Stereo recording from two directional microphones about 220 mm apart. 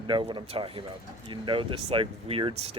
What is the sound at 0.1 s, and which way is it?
A man's voice, 20° right (ahead or behind).